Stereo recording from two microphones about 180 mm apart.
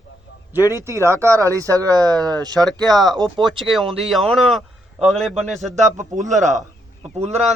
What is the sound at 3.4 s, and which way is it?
Speech, centre (ahead or behind).